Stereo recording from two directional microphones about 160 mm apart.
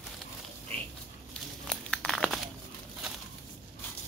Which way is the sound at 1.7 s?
Centre (ahead or behind).